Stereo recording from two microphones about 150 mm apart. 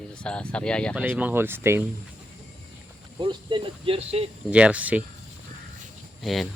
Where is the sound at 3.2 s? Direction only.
35° right (ahead or behind).